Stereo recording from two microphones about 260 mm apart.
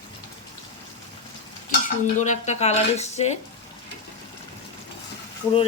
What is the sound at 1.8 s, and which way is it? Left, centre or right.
Dishes, left.